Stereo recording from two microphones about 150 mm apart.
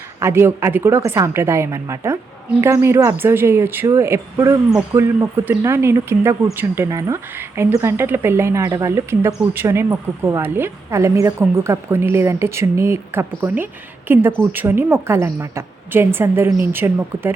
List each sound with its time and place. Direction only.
0.2 s speech: 15° right (ahead or behind)